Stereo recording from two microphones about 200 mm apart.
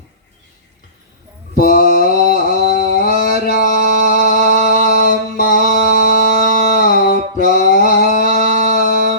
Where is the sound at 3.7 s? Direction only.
40° right (ahead or behind).